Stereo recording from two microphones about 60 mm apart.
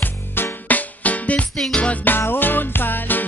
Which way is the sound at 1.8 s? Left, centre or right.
Left.